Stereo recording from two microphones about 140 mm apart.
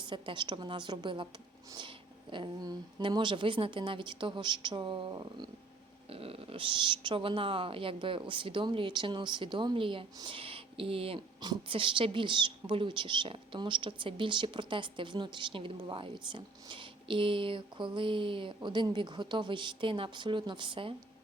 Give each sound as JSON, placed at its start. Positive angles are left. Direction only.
{"t": 0.0, "sound": "speech", "side_deg": -35}
{"t": 6.1, "sound": "speech", "side_deg": -45}